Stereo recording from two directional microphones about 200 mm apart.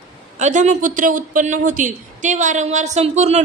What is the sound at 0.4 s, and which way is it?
A woman's voice, 35° right (ahead or behind).